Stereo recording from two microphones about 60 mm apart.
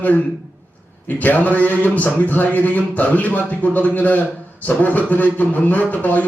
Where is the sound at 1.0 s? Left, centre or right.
Left.